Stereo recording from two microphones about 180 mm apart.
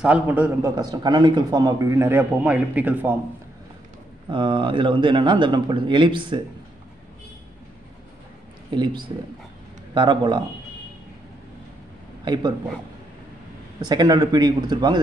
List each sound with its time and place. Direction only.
0.0 s a man's voice: 10° right (ahead or behind)
4.3 s speech: 25° right (ahead or behind)
8.6 s a man's voice: 25° right (ahead or behind)
13.7 s speech: 20° right (ahead or behind)